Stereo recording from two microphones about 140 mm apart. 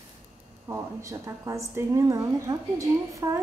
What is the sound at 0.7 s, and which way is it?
A woman's voice, 20° right (ahead or behind).